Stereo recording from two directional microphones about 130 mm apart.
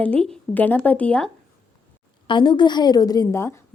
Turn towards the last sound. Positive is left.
turn(degrees=20)  # may be behind; listen again after turning